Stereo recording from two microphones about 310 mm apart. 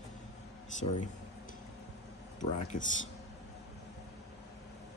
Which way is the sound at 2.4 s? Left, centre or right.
Left.